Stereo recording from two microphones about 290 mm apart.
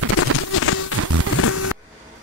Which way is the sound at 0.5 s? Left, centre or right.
Left.